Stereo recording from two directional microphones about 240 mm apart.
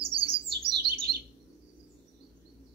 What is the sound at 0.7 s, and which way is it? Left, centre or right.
Bird, right.